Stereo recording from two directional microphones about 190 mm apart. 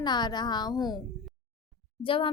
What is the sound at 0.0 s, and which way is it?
Speech, 20° left (ahead or behind).